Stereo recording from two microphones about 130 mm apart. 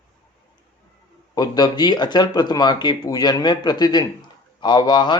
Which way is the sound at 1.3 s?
30° left (ahead or behind).